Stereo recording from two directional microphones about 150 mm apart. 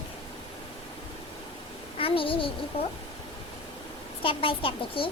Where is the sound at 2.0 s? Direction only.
35° left (ahead or behind).